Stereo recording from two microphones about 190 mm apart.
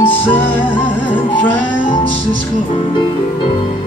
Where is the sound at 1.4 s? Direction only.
45° left (ahead or behind).